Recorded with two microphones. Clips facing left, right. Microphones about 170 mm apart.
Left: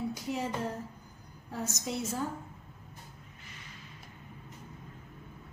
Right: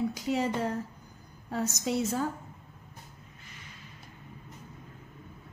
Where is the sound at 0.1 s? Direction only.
80° right.